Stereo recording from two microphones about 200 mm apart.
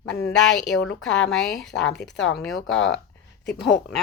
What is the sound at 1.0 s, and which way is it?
Speech, 5° left (ahead or behind).